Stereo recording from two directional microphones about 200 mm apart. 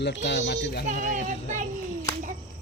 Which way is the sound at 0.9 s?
40° right (ahead or behind).